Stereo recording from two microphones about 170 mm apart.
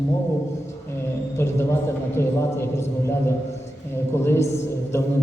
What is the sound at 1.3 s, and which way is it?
Speech, 15° left (ahead or behind).